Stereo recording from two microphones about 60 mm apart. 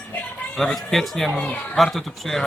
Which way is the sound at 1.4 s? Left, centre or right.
Left.